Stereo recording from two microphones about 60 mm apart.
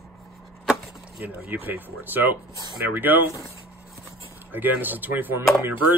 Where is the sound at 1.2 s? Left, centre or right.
Right.